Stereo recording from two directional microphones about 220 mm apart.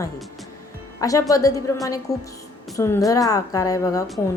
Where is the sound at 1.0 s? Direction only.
15° left (ahead or behind).